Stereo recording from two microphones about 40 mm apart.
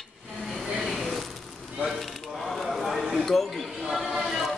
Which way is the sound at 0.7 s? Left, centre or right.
Centre.